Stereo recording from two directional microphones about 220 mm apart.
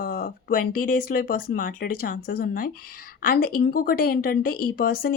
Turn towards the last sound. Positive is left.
turn(degrees=40)  # may be behind; listen again after turning